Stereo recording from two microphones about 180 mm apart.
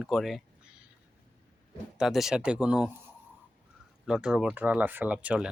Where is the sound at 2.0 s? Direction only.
Centre (ahead or behind).